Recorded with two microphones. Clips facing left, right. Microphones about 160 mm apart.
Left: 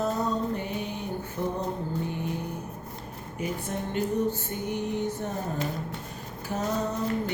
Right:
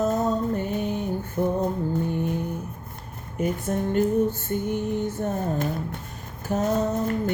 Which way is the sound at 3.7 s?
45° right (ahead or behind).